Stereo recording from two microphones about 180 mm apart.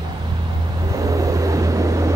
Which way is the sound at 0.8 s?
20° right (ahead or behind).